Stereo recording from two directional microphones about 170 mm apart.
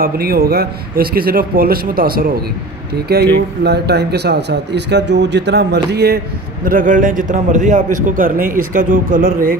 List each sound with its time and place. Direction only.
0.0 s speech: 65° right (ahead or behind)